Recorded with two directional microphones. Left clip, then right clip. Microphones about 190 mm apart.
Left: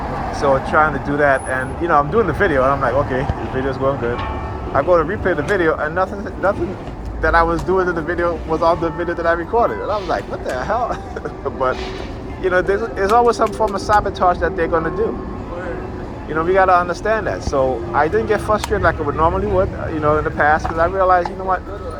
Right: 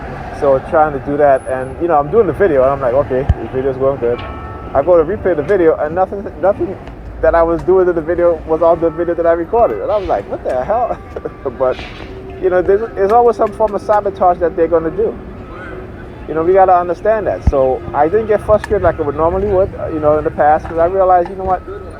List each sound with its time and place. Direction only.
0.3 s speech: 45° right (ahead or behind)
12.5 s speech: 45° right (ahead or behind)
16.3 s speech: 40° right (ahead or behind)